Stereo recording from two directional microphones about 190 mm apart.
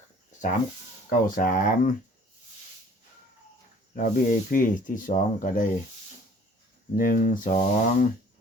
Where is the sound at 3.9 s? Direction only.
45° left (ahead or behind).